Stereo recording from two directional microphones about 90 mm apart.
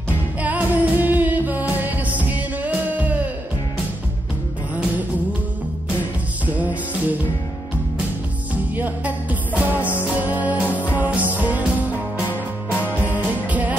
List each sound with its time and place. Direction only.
0.4 s music: 20° right (ahead or behind)
6.4 s music: 15° right (ahead or behind)
8.7 s music: 20° right (ahead or behind)
13.1 s music: 15° right (ahead or behind)